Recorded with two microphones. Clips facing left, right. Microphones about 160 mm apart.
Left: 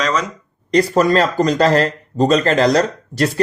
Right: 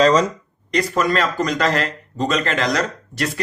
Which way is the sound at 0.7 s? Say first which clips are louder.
Left 6 dB; 35° left (ahead or behind).